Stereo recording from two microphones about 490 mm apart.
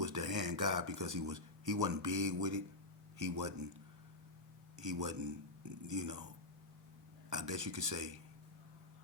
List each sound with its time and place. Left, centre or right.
0.0 s a sound: right
0.5 s speech: right
4.8 s speech: right
7.3 s speech: right